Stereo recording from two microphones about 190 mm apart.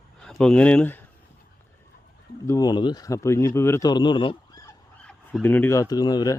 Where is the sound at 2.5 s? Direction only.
20° left (ahead or behind).